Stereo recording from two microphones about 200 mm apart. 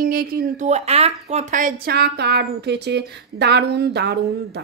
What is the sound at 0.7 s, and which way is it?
Speech, 30° right (ahead or behind).